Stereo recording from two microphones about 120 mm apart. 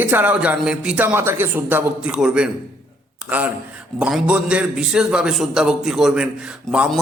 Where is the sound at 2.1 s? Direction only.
5° right (ahead or behind).